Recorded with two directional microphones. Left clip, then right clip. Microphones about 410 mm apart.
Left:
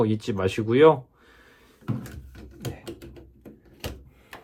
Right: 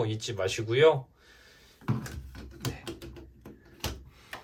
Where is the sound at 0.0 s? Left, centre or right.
Centre.